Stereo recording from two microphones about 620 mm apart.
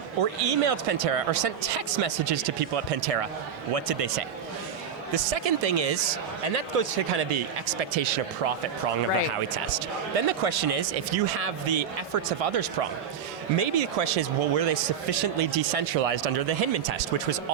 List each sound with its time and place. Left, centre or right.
0.2 s speech: right
5.1 s speech: right
10.2 s speech: right
13.6 s speech: right